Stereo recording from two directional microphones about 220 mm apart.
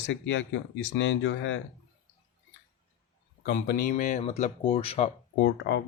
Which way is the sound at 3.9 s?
35° left (ahead or behind).